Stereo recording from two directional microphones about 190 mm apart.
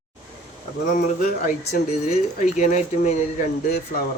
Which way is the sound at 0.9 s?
40° left (ahead or behind).